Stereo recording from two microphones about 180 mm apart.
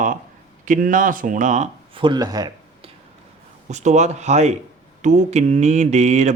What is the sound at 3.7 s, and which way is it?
Mantra, 40° right (ahead or behind).